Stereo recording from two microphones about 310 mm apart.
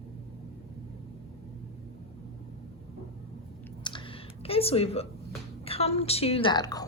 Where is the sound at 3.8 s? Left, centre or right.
Centre.